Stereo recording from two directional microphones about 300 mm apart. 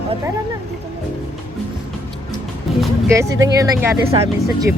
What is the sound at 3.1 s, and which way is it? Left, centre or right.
Speech, centre.